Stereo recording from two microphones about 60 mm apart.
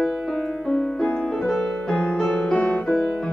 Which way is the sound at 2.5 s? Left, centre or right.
Left.